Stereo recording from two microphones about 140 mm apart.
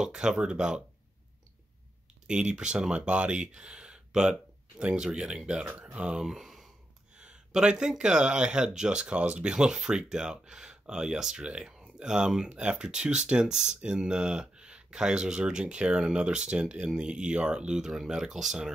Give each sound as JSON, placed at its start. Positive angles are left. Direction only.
{"t": 0.0, "sound": "speech", "side_deg": -5}
{"t": 2.2, "sound": "speech", "side_deg": -5}